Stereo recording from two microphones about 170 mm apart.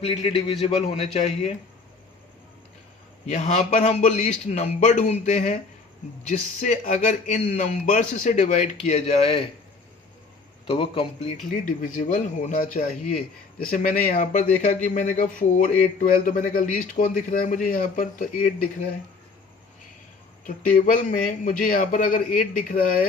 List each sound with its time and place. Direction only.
0.0 s a man's voice: 35° left (ahead or behind)
3.2 s speech: 45° left (ahead or behind)
10.7 s a man's voice: 35° left (ahead or behind)
11.5 s speech: 50° left (ahead or behind)
20.4 s speech: 50° left (ahead or behind)